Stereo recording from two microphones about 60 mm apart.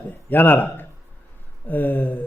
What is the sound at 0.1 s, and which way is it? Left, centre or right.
A man's voice, left.